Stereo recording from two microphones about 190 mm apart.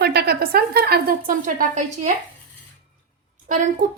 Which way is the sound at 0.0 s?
55° right (ahead or behind).